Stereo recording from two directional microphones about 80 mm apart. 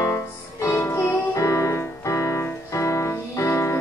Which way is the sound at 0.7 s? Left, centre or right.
Left.